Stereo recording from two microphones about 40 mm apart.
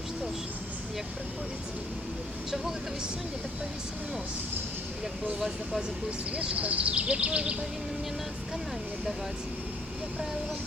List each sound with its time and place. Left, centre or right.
6.1 s speech: right